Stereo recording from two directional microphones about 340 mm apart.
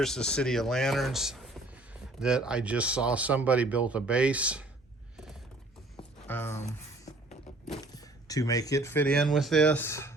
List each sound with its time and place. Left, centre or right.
0.0 s speech: centre
6.0 s music: centre
7.1 s a sound: centre
7.9 s speech: centre